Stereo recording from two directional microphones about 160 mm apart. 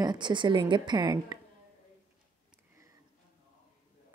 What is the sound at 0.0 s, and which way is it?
A woman's voice, 30° right (ahead or behind).